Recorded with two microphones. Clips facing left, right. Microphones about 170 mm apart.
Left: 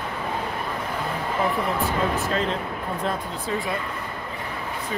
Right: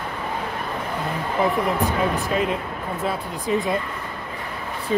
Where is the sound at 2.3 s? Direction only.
10° right (ahead or behind).